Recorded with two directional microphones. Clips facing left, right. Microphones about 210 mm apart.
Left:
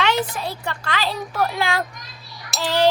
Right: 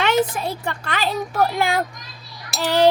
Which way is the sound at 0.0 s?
50° right (ahead or behind).